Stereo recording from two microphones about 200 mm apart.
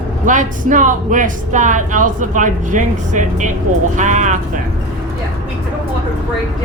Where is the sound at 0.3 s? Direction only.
40° right (ahead or behind).